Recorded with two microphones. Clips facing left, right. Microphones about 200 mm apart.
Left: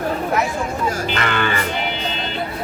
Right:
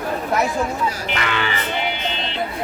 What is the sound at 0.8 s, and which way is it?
Speech, 50° left (ahead or behind).